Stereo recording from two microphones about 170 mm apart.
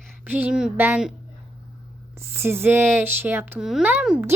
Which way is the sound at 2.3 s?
15° right (ahead or behind).